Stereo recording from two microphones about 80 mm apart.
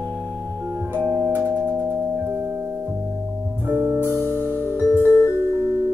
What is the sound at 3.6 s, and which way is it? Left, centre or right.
Music, right.